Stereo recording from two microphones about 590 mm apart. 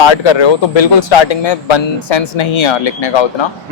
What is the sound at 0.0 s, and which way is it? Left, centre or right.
Speech, left.